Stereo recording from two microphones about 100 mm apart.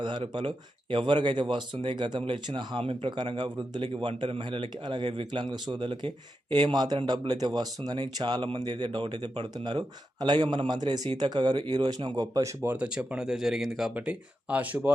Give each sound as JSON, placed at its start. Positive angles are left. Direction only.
{"t": 0.0, "sound": "speech", "side_deg": -50}
{"t": 12.6, "sound": "speech", "side_deg": -10}